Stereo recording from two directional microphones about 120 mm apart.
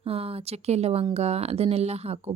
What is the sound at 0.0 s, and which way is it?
A woman's voice, 55° right (ahead or behind).